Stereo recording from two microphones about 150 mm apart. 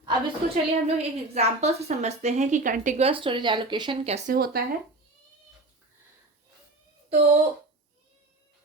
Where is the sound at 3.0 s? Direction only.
35° right (ahead or behind).